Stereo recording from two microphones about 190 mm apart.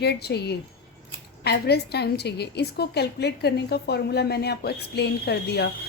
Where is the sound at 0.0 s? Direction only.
60° left (ahead or behind).